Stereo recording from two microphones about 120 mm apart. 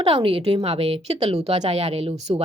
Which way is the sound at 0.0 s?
50° right (ahead or behind).